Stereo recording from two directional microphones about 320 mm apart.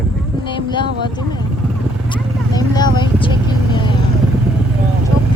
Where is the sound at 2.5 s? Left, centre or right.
Centre.